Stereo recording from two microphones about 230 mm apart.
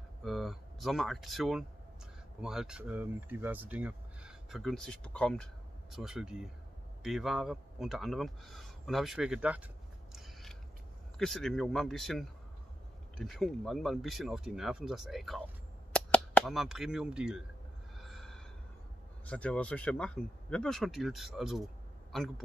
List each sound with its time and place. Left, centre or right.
0.2 s speech: centre
10.1 s mechanisms: centre
11.1 s speech: centre
17.9 s a sound: centre
19.2 s speech: centre